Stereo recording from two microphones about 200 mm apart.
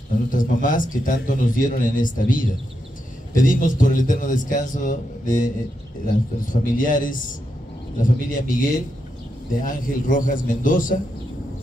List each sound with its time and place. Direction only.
0.3 s speech: 40° left (ahead or behind)
6.5 s speech: 40° left (ahead or behind)